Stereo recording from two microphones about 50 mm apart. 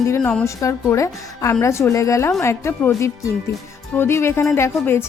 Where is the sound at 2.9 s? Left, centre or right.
Left.